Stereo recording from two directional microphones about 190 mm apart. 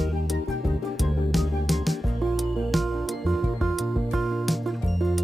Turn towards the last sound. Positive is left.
turn(degrees=0)  # may be behind; listen again after turning